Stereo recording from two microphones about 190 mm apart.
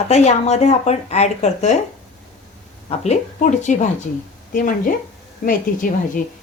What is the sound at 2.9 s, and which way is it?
A woman's voice, 35° left (ahead or behind).